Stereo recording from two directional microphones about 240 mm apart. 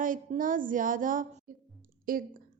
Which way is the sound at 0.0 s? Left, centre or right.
Right.